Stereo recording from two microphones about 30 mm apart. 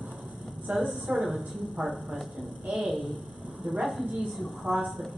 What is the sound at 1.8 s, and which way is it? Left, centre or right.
A woman's voice, centre.